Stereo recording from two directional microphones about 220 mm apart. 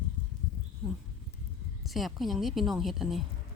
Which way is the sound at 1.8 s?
Centre (ahead or behind).